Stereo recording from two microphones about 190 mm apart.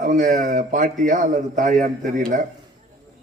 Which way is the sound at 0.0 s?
45° right (ahead or behind).